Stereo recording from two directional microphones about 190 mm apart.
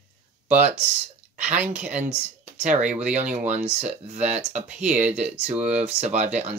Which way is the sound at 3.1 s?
40° right (ahead or behind).